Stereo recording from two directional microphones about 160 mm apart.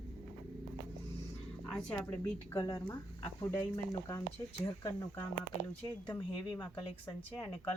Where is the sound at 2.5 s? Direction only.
25° left (ahead or behind).